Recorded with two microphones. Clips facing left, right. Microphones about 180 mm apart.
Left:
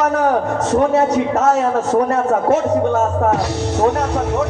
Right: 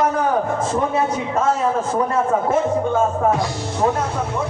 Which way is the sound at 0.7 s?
75° left (ahead or behind).